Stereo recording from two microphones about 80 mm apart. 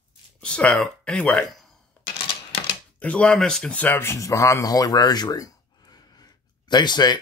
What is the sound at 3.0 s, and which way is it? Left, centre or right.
Speech, centre.